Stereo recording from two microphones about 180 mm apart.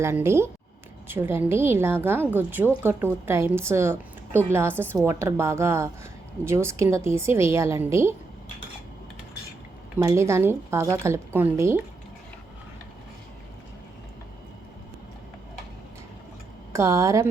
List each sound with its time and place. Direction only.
0.0 s a woman's voice: 15° right (ahead or behind)
10.0 s a woman's voice: 15° right (ahead or behind)
16.7 s a woman's voice: 15° right (ahead or behind)